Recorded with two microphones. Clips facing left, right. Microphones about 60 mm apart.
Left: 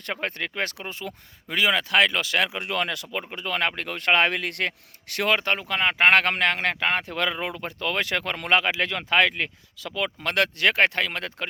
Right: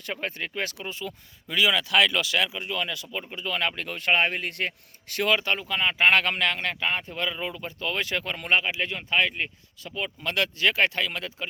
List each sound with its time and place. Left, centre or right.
0.0 s speech: left
3.3 s speech: left